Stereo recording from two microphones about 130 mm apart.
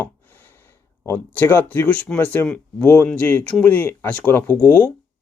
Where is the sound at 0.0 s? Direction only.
15° left (ahead or behind).